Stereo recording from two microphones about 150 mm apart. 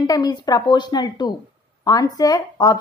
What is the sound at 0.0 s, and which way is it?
A woman's voice, 25° left (ahead or behind).